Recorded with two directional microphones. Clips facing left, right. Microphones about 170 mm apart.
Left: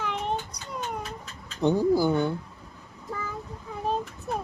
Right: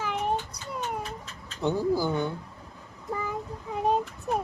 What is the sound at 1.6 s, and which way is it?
Speech, 15° left (ahead or behind).